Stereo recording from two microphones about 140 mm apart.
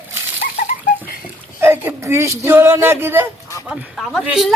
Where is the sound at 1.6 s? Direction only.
15° right (ahead or behind).